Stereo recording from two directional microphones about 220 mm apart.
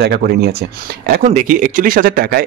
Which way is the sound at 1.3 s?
35° right (ahead or behind).